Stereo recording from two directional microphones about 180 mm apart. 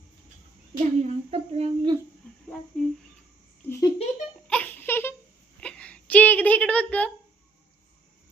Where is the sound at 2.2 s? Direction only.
5° left (ahead or behind).